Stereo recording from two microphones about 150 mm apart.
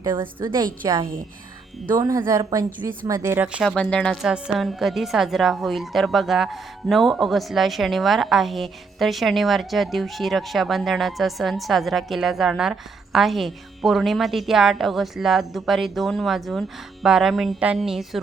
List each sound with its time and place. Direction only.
0.0 s a woman's voice: 30° right (ahead or behind)
3.7 s a woman's voice: 5° left (ahead or behind)